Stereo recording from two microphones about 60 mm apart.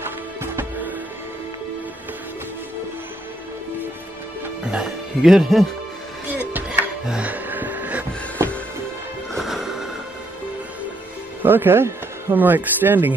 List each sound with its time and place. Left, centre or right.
0.4 s music: right
5.2 s speech: centre
6.2 s music: right
7.1 s a sound: right
8.4 s music: right
9.4 s music: centre
11.4 s speech: right